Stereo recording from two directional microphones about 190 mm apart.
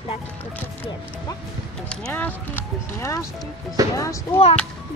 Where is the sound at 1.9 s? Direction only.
5° left (ahead or behind).